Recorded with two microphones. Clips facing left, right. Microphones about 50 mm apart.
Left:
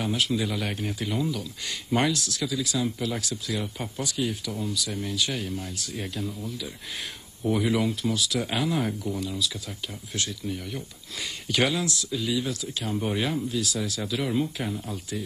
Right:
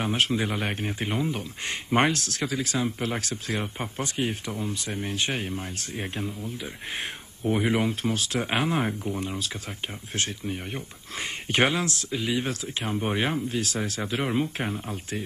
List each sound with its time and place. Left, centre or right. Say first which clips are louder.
0.0 s speech: right 1 dB; right
12.9 s speech: right 1 dB; right